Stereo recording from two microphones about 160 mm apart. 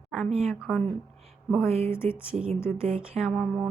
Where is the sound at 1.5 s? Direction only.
15° left (ahead or behind).